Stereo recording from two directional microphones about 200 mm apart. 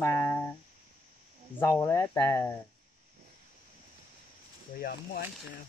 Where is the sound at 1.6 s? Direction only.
10° left (ahead or behind).